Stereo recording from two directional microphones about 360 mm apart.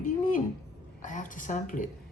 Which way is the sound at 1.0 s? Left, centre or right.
Left.